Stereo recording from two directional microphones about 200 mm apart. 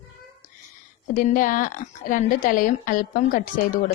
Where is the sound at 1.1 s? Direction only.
40° left (ahead or behind).